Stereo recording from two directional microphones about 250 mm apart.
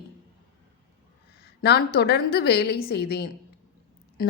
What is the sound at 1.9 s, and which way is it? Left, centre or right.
A woman's voice, left.